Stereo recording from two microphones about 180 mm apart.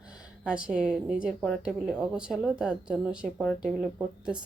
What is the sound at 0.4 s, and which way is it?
A woman's voice, 5° right (ahead or behind).